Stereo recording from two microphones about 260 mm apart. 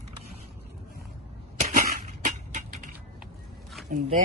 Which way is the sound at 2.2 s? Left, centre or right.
Right.